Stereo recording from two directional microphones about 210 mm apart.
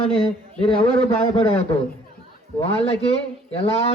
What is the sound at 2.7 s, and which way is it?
Speech, 30° left (ahead or behind).